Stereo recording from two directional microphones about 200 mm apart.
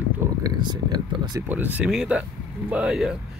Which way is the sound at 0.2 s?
20° right (ahead or behind).